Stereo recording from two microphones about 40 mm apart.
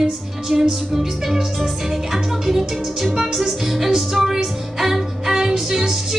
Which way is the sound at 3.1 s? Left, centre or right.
Centre.